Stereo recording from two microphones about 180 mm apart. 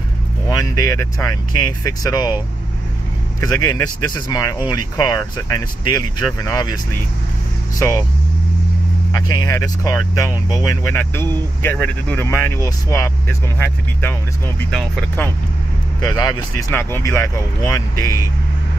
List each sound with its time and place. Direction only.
0.5 s speech: 20° left (ahead or behind)
3.3 s speech: 20° left (ahead or behind)
9.1 s speech: 20° left (ahead or behind)
14.6 s speech: 5° left (ahead or behind)
16.0 s speech: 20° left (ahead or behind)